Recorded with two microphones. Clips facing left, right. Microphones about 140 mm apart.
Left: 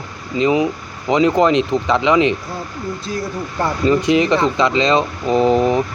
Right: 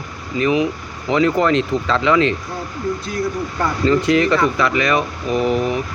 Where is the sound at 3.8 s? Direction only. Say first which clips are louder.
Left 1 dB; 20° left (ahead or behind).